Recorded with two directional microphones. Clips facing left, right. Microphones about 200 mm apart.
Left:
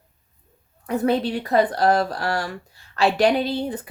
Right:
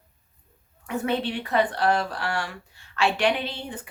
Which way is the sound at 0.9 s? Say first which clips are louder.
Left 5 dB; 40° left (ahead or behind).